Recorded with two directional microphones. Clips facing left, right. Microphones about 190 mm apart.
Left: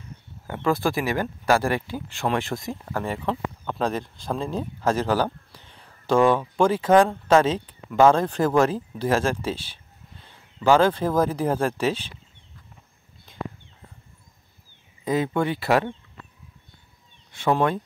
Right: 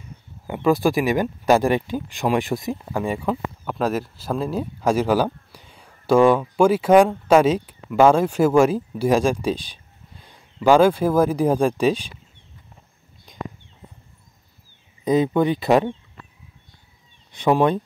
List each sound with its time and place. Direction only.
0.5 s speech: 15° right (ahead or behind)
15.0 s speech: 20° right (ahead or behind)
17.3 s speech: 15° right (ahead or behind)